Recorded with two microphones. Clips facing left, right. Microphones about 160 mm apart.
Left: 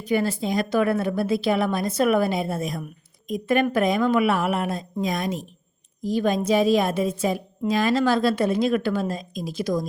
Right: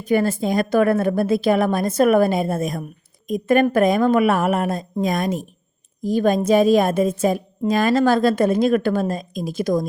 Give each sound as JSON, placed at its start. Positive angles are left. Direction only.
{"t": 0.0, "sound": "a woman's voice", "side_deg": -50}